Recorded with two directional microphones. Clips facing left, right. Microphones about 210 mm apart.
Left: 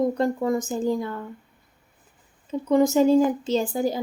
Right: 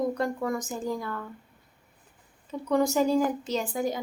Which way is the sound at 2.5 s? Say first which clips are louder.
Left 5 dB; 20° left (ahead or behind).